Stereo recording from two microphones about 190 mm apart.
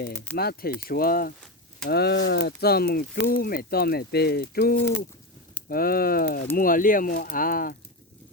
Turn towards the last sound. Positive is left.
turn(degrees=50)  # may be behind; listen again after turning